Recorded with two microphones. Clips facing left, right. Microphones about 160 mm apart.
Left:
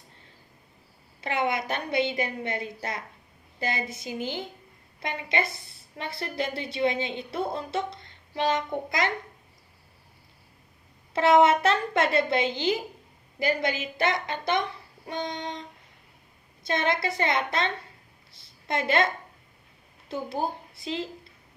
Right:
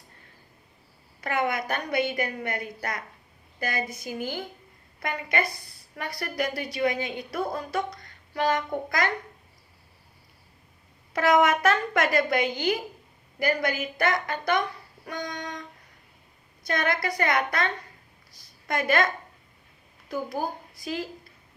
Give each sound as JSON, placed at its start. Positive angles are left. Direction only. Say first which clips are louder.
{"t": 1.2, "sound": "a woman's voice", "louder": "even", "side_deg": 25}
{"t": 11.1, "sound": "a woman's voice", "louder": "left 2 dB", "side_deg": 25}
{"t": 16.6, "sound": "a woman's voice", "louder": "left 1 dB", "side_deg": 25}